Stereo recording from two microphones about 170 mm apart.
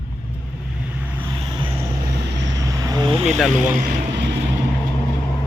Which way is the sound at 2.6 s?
20° right (ahead or behind).